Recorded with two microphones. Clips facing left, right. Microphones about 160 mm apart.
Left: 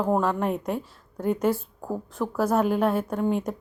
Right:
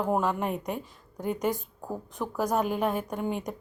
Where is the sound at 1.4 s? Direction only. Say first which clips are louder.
Left 5 dB; 15° right (ahead or behind).